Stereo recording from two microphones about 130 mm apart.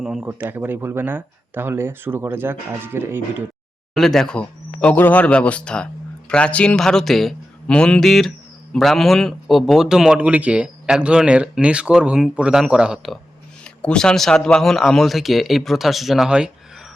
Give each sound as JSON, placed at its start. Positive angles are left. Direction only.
{"t": 0.0, "sound": "speech", "side_deg": -5}
{"t": 3.9, "sound": "a man's voice", "side_deg": 5}
{"t": 13.7, "sound": "a man's voice", "side_deg": 5}